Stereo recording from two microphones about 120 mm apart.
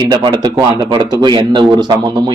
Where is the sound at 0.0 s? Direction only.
40° right (ahead or behind).